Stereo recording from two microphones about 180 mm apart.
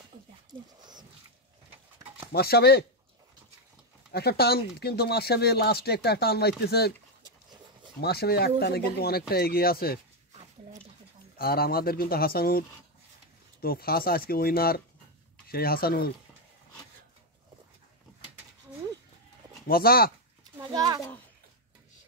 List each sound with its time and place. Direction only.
2.3 s speech: 60° left (ahead or behind)
4.1 s speech: 60° left (ahead or behind)
8.0 s speech: 60° left (ahead or behind)
10.3 s a sound: 35° right (ahead or behind)
11.3 s speech: 55° left (ahead or behind)
19.7 s speech: 55° left (ahead or behind)
20.5 s a child's voice: 20° right (ahead or behind)